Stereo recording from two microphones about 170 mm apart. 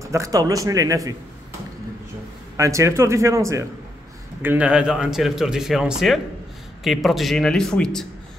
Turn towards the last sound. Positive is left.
turn(degrees=5)  # may be behind; listen again after turning